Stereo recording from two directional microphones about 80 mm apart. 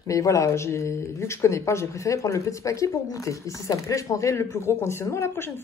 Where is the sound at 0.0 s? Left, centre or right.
Left.